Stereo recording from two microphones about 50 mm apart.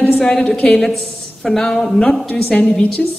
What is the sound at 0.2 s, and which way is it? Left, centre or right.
A woman's voice, centre.